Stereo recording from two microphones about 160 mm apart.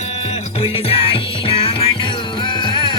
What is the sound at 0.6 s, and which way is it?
Music, 35° left (ahead or behind).